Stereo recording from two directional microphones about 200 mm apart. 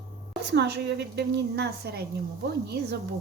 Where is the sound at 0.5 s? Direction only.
55° right (ahead or behind).